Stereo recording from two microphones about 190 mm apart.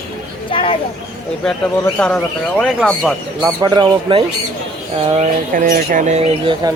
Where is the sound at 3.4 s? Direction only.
20° right (ahead or behind).